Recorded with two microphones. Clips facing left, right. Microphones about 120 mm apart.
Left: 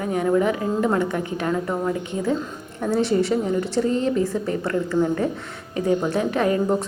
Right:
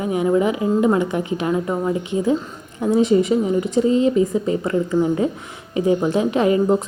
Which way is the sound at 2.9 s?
75° left (ahead or behind).